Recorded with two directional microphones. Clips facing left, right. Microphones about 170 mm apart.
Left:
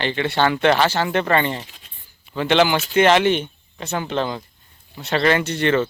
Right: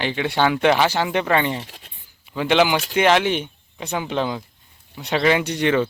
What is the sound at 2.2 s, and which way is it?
Speech, 10° right (ahead or behind).